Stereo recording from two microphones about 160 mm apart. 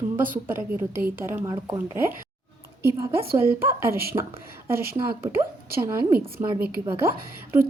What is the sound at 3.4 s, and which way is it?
A woman's voice, 15° right (ahead or behind).